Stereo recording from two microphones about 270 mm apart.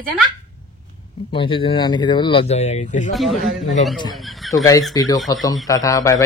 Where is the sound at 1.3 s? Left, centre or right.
Centre.